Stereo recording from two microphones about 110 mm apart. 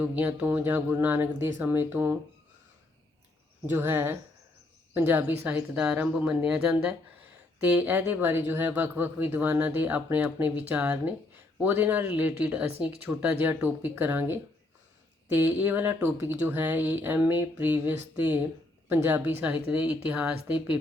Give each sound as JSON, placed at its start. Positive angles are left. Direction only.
{"t": 0.0, "sound": "speech", "side_deg": -15}
{"t": 3.7, "sound": "speech", "side_deg": -20}